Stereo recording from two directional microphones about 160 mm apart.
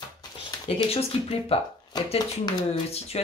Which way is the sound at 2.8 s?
40° left (ahead or behind).